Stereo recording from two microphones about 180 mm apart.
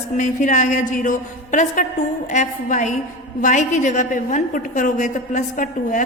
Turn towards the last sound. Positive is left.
turn(degrees=45)  # may be behind; listen again after turning